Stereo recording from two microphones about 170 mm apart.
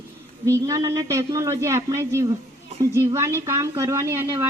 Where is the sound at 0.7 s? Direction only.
20° right (ahead or behind).